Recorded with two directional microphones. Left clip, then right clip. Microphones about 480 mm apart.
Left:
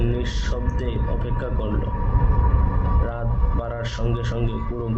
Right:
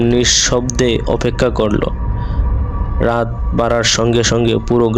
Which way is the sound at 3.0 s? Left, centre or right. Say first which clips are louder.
Right 14 dB; centre.